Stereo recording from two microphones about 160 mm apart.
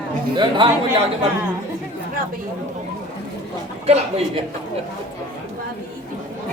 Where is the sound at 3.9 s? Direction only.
40° right (ahead or behind).